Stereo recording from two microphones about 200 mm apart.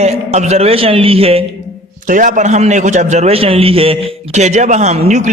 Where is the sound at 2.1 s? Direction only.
40° right (ahead or behind).